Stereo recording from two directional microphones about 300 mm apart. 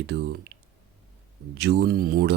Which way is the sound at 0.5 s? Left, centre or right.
Right.